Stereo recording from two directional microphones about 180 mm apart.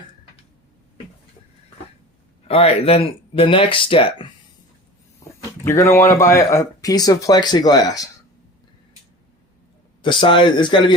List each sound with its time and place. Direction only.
2.5 s speech: 35° left (ahead or behind)
5.4 s speech: 15° left (ahead or behind)
10.0 s speech: 25° left (ahead or behind)